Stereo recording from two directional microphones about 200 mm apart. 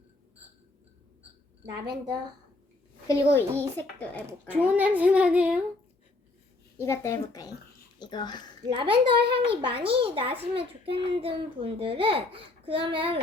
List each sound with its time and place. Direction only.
1.6 s a child's voice: 20° right (ahead or behind)
3.1 s a child's voice: 15° left (ahead or behind)
4.3 s a child's voice: 5° right (ahead or behind)
6.7 s a child's voice: 15° left (ahead or behind)
8.6 s a child's voice: 25° right (ahead or behind)